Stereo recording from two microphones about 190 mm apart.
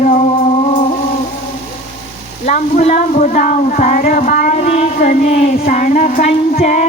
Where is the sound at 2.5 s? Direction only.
40° left (ahead or behind).